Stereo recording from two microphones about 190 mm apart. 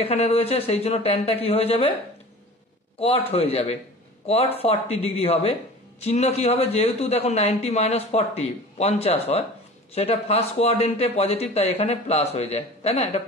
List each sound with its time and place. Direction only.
0.0 s a man's voice: 30° left (ahead or behind)
3.0 s a man's voice: 30° left (ahead or behind)